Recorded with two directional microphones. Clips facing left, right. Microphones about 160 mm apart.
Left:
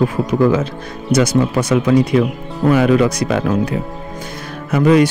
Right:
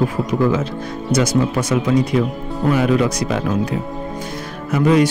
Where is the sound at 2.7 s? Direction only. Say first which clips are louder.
Left 4 dB; 75° left (ahead or behind).